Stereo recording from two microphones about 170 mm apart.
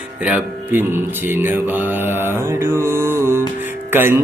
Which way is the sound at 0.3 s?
10° right (ahead or behind).